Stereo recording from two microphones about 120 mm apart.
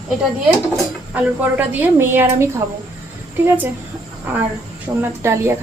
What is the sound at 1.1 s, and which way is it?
A woman's voice, 15° right (ahead or behind).